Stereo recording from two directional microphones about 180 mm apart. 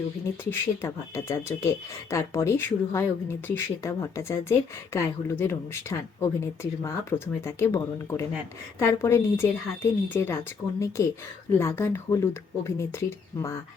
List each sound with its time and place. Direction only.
0.8 s speech: 15° left (ahead or behind)